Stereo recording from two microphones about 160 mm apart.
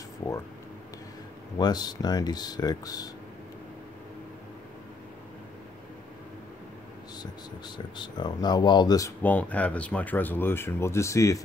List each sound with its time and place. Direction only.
1.6 s speech: 25° left (ahead or behind)
7.6 s speech: 30° left (ahead or behind)
9.2 s speech: 10° left (ahead or behind)